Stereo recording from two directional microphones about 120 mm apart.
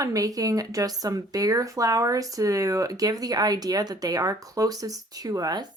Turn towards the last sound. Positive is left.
turn(degrees=-30)  # may be behind; listen again after turning